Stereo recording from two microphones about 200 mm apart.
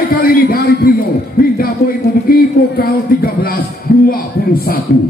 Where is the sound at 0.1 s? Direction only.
45° left (ahead or behind).